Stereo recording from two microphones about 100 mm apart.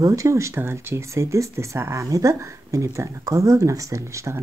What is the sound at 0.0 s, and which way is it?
Speech, 35° right (ahead or behind).